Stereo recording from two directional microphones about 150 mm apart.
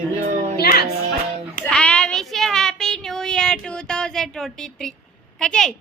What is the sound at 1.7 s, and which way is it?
Child singing, 5° left (ahead or behind).